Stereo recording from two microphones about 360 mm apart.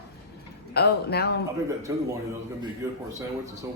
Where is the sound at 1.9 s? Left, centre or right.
Centre.